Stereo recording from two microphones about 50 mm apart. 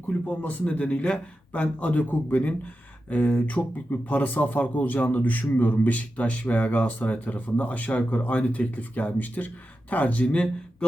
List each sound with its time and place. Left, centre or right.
0.3 s a man's voice: left
10.2 s speech: left